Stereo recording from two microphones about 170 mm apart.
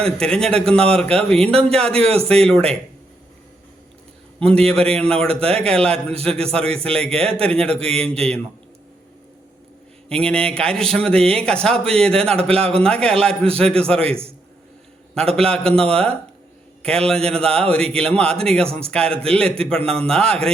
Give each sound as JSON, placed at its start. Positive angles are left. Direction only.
{"t": 0.0, "sound": "a man's voice", "side_deg": 5}
{"t": 4.4, "sound": "a man's voice", "side_deg": 5}
{"t": 10.1, "sound": "a man's voice", "side_deg": 5}
{"t": 12.5, "sound": "a man's voice", "side_deg": -35}
{"t": 12.8, "sound": "a man's voice", "side_deg": 5}
{"t": 15.4, "sound": "a man's voice", "side_deg": 5}